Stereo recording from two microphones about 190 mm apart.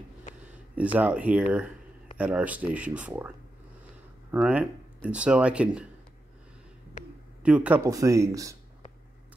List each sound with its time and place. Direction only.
0.9 s speech: 10° right (ahead or behind)
7.4 s speech: 5° right (ahead or behind)
7.8 s speech: 15° right (ahead or behind)